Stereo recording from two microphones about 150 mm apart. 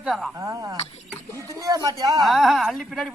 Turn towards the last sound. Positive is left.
turn(degrees=0)  # may be behind; listen again after turning